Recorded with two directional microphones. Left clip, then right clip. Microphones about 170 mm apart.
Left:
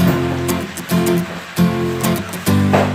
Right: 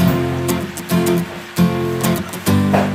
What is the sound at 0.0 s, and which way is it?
Music, centre (ahead or behind).